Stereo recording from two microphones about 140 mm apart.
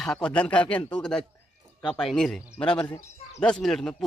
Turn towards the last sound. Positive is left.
turn(degrees=5)  # may be behind; listen again after turning